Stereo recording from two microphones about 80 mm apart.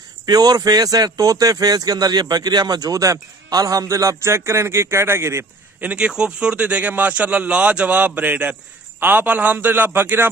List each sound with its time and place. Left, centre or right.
0.3 s speech: right
5.8 s a man's voice: centre